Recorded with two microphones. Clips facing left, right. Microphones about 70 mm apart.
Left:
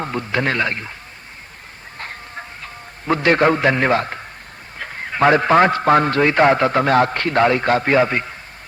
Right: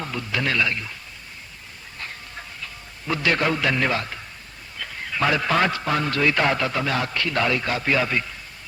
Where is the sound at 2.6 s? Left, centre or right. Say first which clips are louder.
Left 4 dB; left.